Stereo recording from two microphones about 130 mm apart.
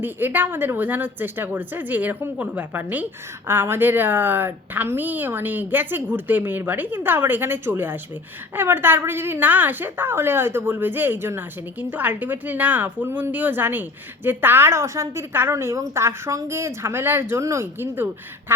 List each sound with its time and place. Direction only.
0.0 s a woman's voice: 15° right (ahead or behind)